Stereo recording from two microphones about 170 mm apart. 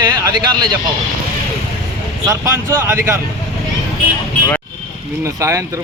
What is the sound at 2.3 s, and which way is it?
Speech, 15° right (ahead or behind).